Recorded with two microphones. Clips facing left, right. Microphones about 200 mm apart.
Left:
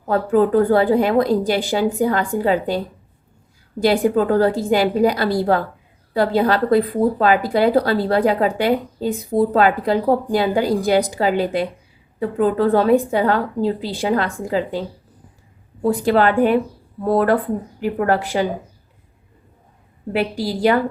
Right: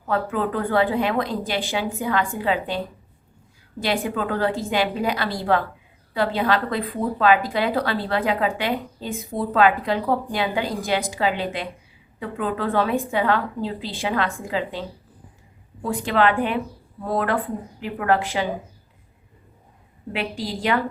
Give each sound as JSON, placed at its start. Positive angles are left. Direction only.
{"t": 0.1, "sound": "a woman's voice", "side_deg": 40}
{"t": 3.8, "sound": "a woman's voice", "side_deg": 40}